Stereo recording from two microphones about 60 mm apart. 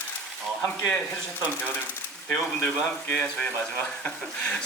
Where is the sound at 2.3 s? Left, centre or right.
Left.